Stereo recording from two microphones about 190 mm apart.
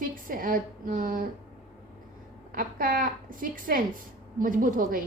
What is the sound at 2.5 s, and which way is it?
A woman's voice, 50° right (ahead or behind).